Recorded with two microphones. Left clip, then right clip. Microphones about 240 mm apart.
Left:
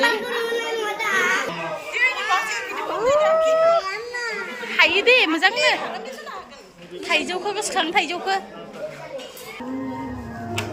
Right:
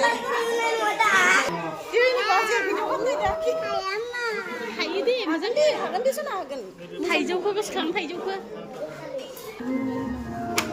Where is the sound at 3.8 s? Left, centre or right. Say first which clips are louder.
Left 1 dB; right.